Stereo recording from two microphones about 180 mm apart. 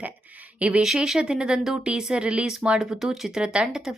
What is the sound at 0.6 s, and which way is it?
A woman's voice, 5° right (ahead or behind).